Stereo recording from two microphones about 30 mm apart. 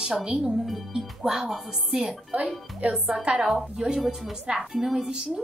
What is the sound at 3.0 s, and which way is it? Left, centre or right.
Speech, right.